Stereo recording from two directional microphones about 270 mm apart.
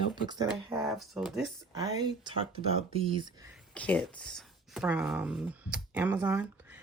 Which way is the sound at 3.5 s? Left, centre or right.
Centre.